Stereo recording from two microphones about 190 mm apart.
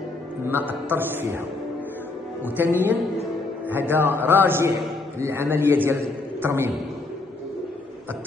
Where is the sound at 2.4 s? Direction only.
10° right (ahead or behind).